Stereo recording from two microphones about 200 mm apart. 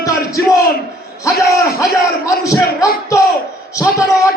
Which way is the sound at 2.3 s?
15° left (ahead or behind).